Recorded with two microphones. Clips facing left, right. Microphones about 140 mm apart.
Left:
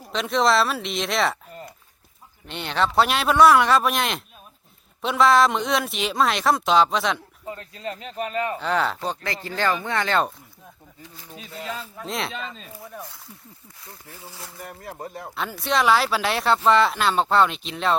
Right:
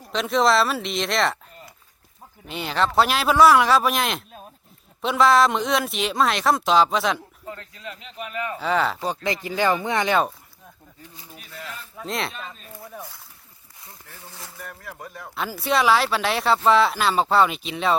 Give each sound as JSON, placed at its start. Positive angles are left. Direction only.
{"t": 0.0, "sound": "speech", "side_deg": 0}
{"t": 2.5, "sound": "speech", "side_deg": 0}
{"t": 7.4, "sound": "a sound", "side_deg": 20}
{"t": 7.8, "sound": "speech", "side_deg": 40}
{"t": 8.5, "sound": "speech", "side_deg": 0}
{"t": 9.0, "sound": "speech", "side_deg": -15}
{"t": 11.9, "sound": "speech", "side_deg": 0}
{"t": 14.6, "sound": "speech", "side_deg": 25}
{"t": 15.4, "sound": "speech", "side_deg": -5}